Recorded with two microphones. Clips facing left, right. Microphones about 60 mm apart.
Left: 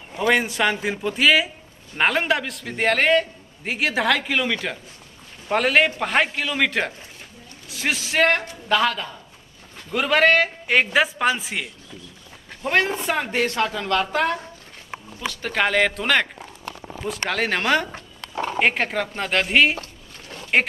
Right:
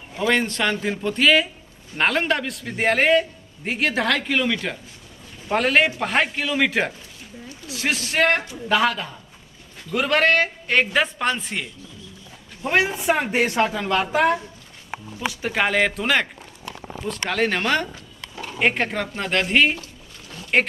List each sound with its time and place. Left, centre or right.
0.3 s a man's voice: centre
12.6 s speech: centre
17.3 s a man's voice: centre
17.9 s a sound: left
18.6 s a man's voice: centre
19.8 s a sound: left